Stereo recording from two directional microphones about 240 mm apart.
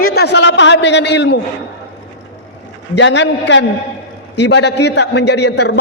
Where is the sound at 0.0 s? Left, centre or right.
Left.